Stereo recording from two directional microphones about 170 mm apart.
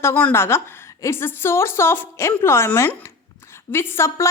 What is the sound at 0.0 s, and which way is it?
A woman's voice, 10° left (ahead or behind).